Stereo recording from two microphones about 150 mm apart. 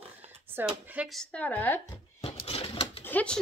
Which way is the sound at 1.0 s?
5° left (ahead or behind).